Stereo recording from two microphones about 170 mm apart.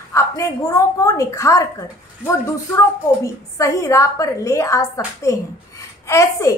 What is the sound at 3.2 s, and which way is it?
A woman's voice, 15° left (ahead or behind).